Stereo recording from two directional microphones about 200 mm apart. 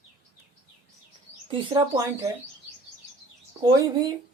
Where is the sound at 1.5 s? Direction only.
20° right (ahead or behind).